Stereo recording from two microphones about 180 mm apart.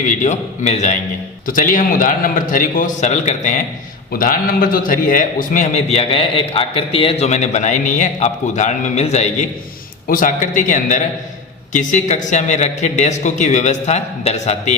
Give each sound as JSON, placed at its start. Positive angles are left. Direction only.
{"t": 0.0, "sound": "a man's voice", "side_deg": 45}
{"t": 4.1, "sound": "a man's voice", "side_deg": 50}